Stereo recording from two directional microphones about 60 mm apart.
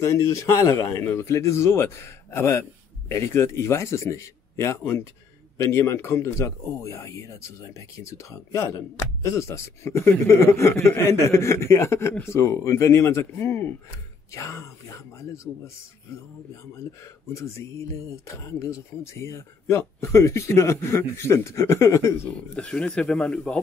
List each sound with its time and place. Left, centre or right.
0.0 s speech: left
14.3 s speech: left
17.3 s speech: left
22.5 s speech: centre